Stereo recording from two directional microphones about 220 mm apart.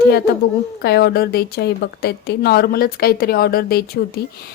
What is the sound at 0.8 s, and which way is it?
A woman's voice, 45° left (ahead or behind).